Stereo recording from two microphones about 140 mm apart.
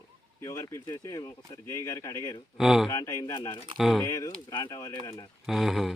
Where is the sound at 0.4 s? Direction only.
25° left (ahead or behind).